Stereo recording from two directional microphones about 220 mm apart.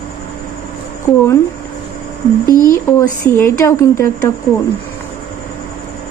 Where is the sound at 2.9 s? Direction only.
10° left (ahead or behind).